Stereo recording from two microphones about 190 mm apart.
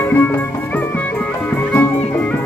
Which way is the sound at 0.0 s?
10° left (ahead or behind).